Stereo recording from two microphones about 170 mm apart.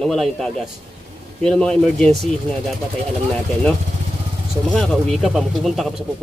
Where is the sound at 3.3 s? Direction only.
5° left (ahead or behind).